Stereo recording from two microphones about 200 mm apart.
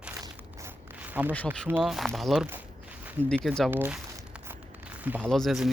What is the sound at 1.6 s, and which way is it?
Speech, 5° right (ahead or behind).